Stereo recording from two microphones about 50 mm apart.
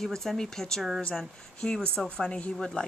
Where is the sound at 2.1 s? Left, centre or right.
Centre.